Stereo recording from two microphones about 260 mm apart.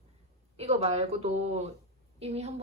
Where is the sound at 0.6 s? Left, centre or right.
Right.